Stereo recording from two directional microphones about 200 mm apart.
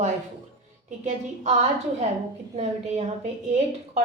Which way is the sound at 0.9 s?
40° right (ahead or behind).